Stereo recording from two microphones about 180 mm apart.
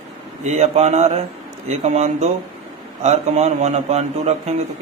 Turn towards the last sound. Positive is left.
turn(degrees=-35)  # may be behind; listen again after turning